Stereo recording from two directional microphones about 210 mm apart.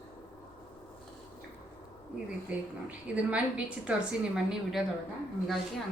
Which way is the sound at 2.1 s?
5° right (ahead or behind).